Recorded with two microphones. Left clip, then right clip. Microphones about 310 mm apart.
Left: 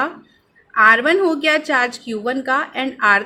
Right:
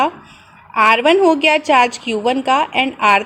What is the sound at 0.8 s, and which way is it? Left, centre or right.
A woman's voice, centre.